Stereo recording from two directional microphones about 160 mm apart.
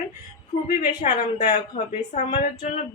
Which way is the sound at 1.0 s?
45° left (ahead or behind).